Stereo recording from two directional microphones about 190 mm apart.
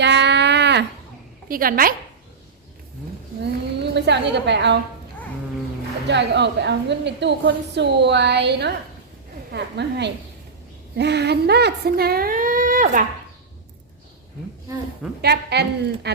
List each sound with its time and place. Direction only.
0.0 s a sound: 65° right (ahead or behind)
1.5 s speech: 50° right (ahead or behind)
3.4 s a woman's voice: 65° right (ahead or behind)
6.1 s a woman's voice: 65° right (ahead or behind); by 13.1 s 45° right (ahead or behind)
15.2 s a woman's voice: 60° right (ahead or behind)